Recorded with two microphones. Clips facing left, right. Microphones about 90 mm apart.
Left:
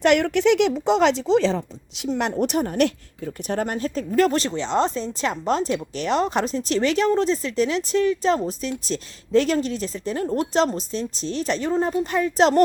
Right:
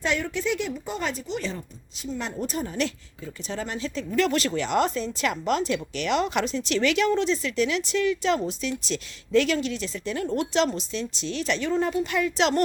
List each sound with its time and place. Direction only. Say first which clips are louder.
0.0 s speech: left 9 dB; 65° left (ahead or behind); by 12.6 s 40° left (ahead or behind)